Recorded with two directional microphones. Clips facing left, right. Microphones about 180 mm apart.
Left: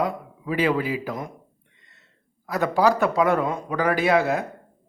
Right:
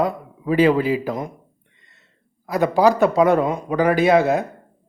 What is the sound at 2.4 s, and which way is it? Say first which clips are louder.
A man's voice: right 4 dB; 15° right (ahead or behind).